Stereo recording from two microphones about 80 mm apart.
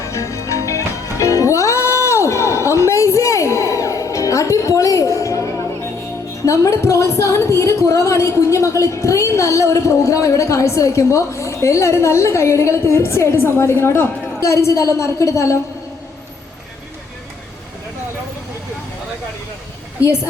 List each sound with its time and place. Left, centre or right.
0.0 s music: left
6.4 s a woman's voice: left